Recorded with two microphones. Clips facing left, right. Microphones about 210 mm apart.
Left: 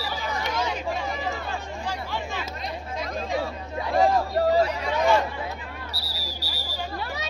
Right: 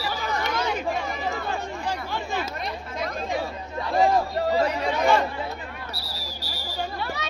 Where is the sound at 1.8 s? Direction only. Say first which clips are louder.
Right 1 dB; 55° right (ahead or behind).